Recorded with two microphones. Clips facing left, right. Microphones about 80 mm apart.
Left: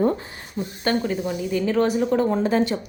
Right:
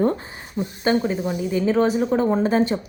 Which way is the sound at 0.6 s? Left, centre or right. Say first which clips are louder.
Right 3 dB; centre.